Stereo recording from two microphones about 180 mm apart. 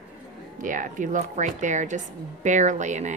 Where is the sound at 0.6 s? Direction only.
45° right (ahead or behind).